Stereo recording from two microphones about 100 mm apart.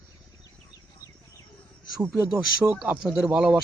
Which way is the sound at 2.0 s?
20° right (ahead or behind).